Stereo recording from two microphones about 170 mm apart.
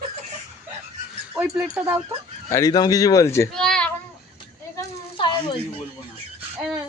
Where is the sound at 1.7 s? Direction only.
10° right (ahead or behind).